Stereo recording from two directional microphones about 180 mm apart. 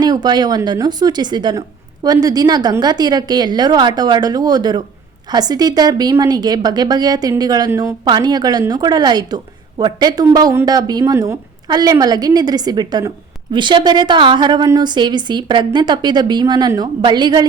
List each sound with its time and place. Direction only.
0.0 s a woman's voice: 20° right (ahead or behind)